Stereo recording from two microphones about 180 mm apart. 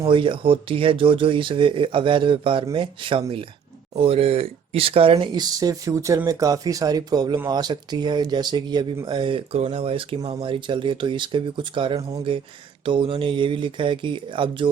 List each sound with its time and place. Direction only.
0.0 s speech: 30° right (ahead or behind)